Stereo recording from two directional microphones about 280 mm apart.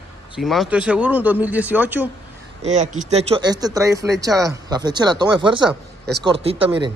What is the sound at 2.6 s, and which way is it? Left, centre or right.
A man's voice, right.